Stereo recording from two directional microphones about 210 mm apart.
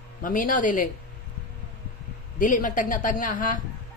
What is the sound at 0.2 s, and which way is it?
Speech, 40° left (ahead or behind).